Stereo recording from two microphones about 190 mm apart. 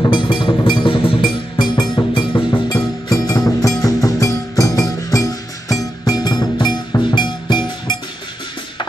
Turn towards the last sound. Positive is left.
turn(degrees=25)  # may be behind; listen again after turning